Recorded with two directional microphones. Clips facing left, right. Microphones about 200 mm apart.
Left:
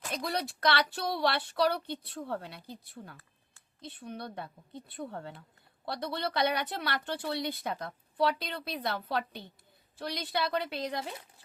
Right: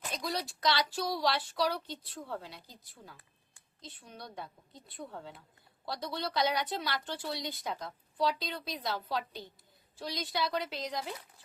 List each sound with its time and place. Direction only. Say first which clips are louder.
0.1 s a woman's voice: left 3 dB; 60° left (ahead or behind)